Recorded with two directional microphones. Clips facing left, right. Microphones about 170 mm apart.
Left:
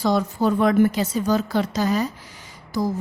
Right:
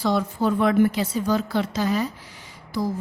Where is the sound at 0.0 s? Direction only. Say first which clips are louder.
Left 2 dB; 40° left (ahead or behind).